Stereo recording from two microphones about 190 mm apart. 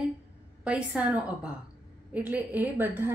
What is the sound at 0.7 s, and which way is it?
A woman's voice, 5° right (ahead or behind).